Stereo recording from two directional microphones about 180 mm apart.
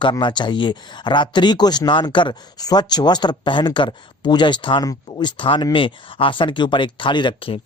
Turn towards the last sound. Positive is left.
turn(degrees=30)  # may be behind; listen again after turning